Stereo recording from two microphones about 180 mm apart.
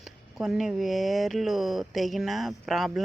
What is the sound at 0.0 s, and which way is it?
Speech, centre (ahead or behind).